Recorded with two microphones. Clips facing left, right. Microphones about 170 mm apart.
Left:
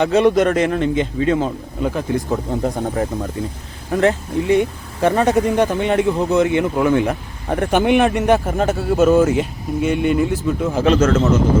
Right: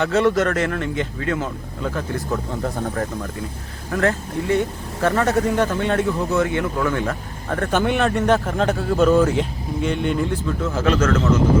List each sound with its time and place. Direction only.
0.0 s a man's voice: 15° left (ahead or behind)
10.7 s speech: 20° left (ahead or behind)